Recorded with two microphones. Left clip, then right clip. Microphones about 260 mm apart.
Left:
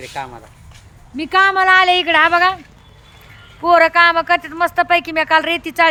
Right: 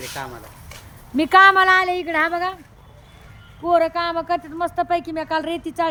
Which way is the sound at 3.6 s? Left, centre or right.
Left.